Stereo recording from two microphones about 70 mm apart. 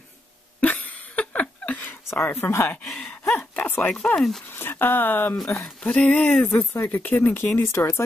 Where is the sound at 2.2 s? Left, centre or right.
Left.